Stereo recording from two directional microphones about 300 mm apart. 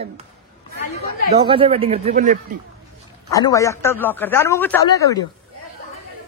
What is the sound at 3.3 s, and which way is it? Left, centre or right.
A man's voice, centre.